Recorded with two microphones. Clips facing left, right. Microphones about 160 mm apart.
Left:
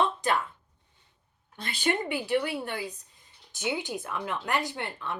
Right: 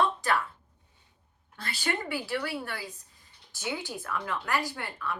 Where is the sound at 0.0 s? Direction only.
20° left (ahead or behind).